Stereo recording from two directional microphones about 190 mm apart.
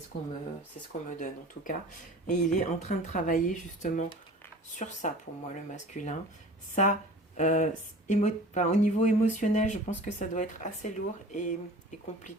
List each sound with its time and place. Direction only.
0.1 s speech: 40° left (ahead or behind)
7.3 s speech: 40° left (ahead or behind)